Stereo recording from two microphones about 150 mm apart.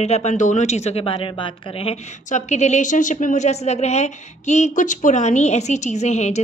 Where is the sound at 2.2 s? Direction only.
50° left (ahead or behind).